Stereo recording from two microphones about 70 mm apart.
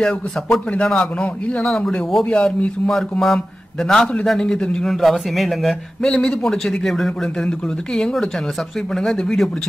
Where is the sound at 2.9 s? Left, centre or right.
Centre.